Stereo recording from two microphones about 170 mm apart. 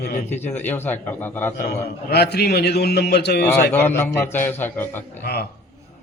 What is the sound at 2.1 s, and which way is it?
A man's voice, 75° left (ahead or behind).